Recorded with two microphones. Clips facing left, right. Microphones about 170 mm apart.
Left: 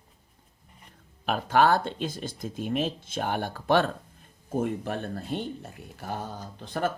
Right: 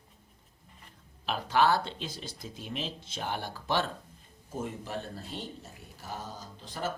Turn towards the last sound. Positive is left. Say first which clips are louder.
# left 6 dB
turn(degrees=55)  # may be behind; listen again after turning